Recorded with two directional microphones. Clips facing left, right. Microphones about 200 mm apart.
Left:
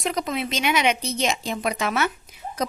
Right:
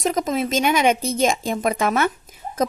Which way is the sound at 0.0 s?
45° right (ahead or behind).